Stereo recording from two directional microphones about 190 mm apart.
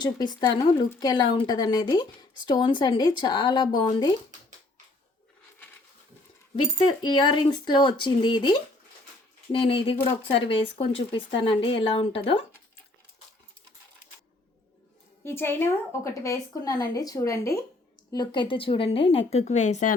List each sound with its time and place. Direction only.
0.0 s a woman's voice: 20° left (ahead or behind)
7.0 s a woman's voice: 25° left (ahead or behind)
15.2 s a woman's voice: 10° left (ahead or behind); by 19.9 s 40° left (ahead or behind)